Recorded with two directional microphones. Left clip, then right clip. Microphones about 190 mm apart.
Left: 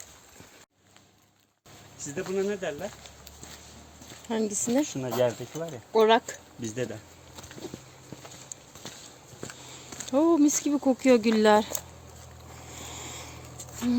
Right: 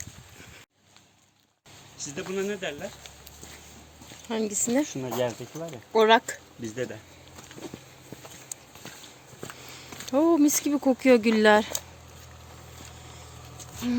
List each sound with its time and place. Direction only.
2.1 s speech: 30° left (ahead or behind)
4.3 s speech: 10° left (ahead or behind)
4.9 s speech: 45° left (ahead or behind)
5.9 s speech: centre (ahead or behind)
6.6 s speech: 55° left (ahead or behind)
9.7 s speech: centre (ahead or behind)